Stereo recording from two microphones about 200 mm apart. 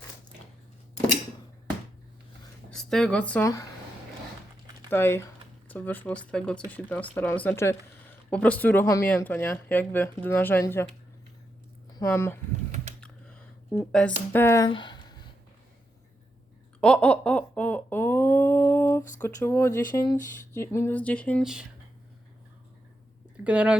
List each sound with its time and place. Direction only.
2.6 s speech: 5° left (ahead or behind)
4.9 s speech: 10° left (ahead or behind)
11.9 s speech: 10° left (ahead or behind)
13.0 s a sound: 5° left (ahead or behind)
14.3 s speech: 15° left (ahead or behind)
14.7 s a sound: 20° left (ahead or behind)
16.8 s a sound: 5° left (ahead or behind)
19.2 s speech: 15° left (ahead or behind); by 21.7 s 5° right (ahead or behind)
23.4 s speech: 5° right (ahead or behind)